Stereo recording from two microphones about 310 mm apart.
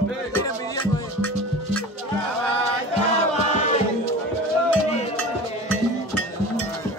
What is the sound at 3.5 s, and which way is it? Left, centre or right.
Choir, left.